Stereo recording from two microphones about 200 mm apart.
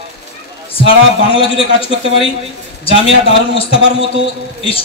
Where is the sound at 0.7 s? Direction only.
30° left (ahead or behind).